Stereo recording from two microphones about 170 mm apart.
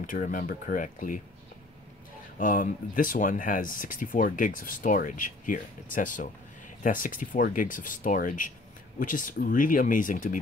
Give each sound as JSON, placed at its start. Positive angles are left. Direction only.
{"t": 0.0, "sound": "speech", "side_deg": 50}
{"t": 2.3, "sound": "speech", "side_deg": 50}